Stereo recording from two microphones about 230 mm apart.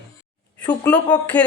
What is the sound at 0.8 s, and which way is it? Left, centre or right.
Speech, centre.